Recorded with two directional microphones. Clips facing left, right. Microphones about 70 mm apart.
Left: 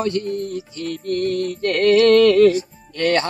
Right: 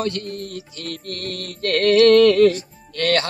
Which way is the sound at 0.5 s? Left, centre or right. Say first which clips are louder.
Left 5 dB; left.